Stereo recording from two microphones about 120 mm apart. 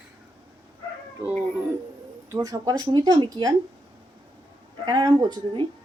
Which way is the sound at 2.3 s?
30° right (ahead or behind).